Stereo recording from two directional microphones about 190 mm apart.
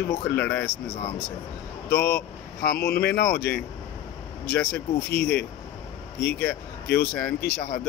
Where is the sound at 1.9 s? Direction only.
55° left (ahead or behind).